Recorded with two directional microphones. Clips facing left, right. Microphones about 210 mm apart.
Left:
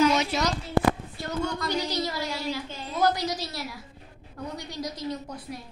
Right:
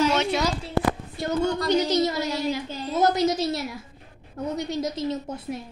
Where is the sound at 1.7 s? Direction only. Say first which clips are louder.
Right 7 dB; 20° right (ahead or behind).